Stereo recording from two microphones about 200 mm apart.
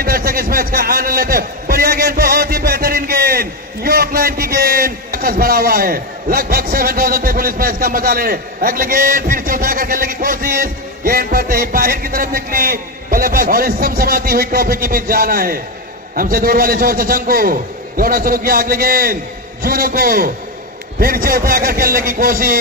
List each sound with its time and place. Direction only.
0.0 s a man's voice: 45° right (ahead or behind)